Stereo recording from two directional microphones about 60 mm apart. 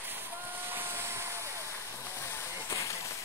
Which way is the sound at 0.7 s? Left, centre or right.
Right.